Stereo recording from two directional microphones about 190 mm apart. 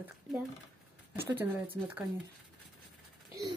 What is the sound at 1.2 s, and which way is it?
Speech, 10° right (ahead or behind).